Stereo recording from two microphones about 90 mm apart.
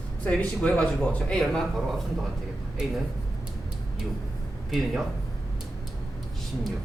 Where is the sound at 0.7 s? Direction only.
15° left (ahead or behind).